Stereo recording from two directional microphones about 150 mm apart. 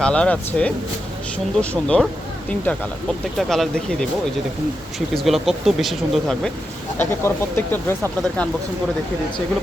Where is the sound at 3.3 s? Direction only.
Centre (ahead or behind).